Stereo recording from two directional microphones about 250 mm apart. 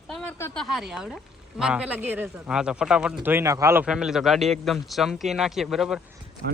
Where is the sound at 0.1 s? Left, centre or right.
Centre.